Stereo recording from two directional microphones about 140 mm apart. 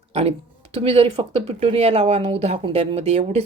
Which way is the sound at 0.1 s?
45° right (ahead or behind).